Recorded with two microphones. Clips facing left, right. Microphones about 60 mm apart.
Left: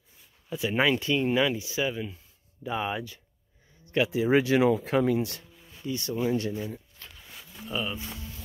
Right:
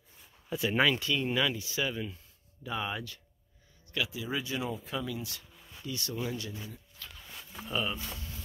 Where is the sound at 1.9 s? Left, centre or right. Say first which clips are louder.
Left 3 dB; centre.